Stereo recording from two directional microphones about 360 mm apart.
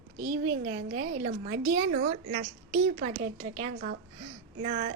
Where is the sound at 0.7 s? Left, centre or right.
Right.